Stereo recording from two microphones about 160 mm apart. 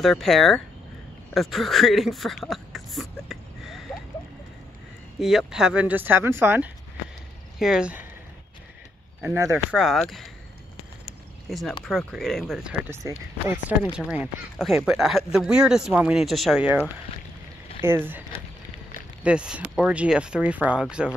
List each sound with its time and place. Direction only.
0.0 s speech: centre (ahead or behind)
1.3 s a sound: centre (ahead or behind)
5.2 s speech: centre (ahead or behind)
7.5 s speech: 5° right (ahead or behind)
9.2 s speech: 15° right (ahead or behind)
9.7 s speech: centre (ahead or behind)
11.1 s a sound: centre (ahead or behind)
11.8 s speech: centre (ahead or behind)
13.9 s speech: 5° right (ahead or behind)
19.2 s speech: 5° right (ahead or behind)